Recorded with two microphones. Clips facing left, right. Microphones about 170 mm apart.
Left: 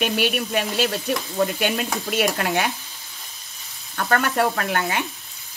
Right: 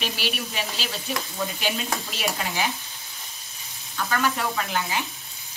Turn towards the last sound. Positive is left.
turn(degrees=60)  # may be behind; listen again after turning